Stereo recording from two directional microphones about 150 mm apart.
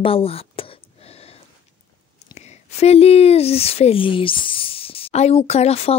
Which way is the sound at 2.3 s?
45° left (ahead or behind).